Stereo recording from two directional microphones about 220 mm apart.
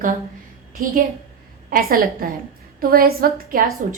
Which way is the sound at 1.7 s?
40° right (ahead or behind).